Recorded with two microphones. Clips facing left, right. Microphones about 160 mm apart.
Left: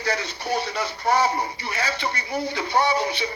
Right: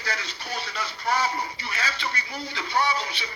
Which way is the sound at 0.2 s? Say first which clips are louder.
Left 8 dB; 20° left (ahead or behind).